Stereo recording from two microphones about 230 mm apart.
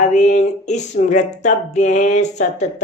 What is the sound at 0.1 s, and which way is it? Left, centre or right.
Speech, left.